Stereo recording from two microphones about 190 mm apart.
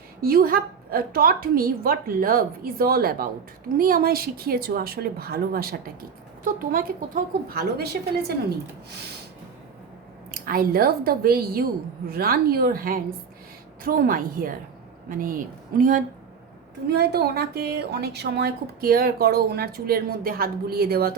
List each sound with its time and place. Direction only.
0.2 s a woman's voice: 50° right (ahead or behind)
10.3 s a woman's voice: 50° right (ahead or behind)
16.9 s a woman's voice: 55° right (ahead or behind)